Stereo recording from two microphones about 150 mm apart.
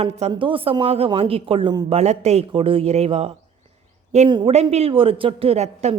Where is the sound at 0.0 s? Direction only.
45° right (ahead or behind).